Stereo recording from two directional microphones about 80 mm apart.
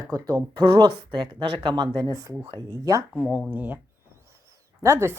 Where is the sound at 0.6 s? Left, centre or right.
Right.